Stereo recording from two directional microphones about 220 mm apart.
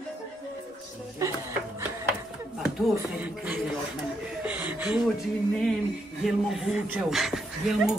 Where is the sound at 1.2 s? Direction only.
15° right (ahead or behind).